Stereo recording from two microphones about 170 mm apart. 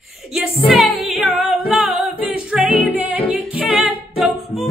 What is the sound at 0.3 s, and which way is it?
Music, centre (ahead or behind).